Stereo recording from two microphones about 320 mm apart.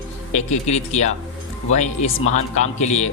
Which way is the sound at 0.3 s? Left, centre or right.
Left.